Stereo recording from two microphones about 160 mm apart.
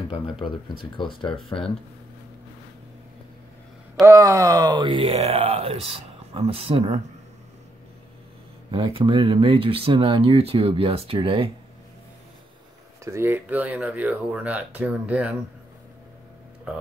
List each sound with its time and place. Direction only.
0.1 s speech: 30° left (ahead or behind)
4.0 s speech: 20° right (ahead or behind); by 7.0 s 40° right (ahead or behind)
8.7 s speech: 30° right (ahead or behind)
13.0 s speech: 15° right (ahead or behind)